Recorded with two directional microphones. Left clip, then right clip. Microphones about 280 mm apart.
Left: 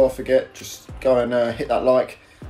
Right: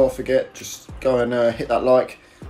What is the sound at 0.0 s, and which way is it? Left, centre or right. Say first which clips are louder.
Speech: left 1 dB; centre.